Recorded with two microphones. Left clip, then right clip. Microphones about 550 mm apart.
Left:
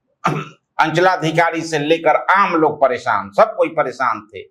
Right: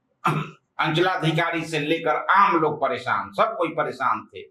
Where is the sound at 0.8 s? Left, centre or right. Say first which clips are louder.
Left 8 dB; left.